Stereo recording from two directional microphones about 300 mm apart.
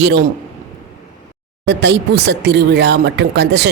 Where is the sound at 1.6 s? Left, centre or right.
Right.